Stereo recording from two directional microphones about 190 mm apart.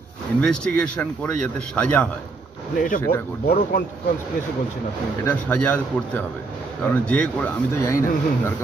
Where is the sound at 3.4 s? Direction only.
50° left (ahead or behind).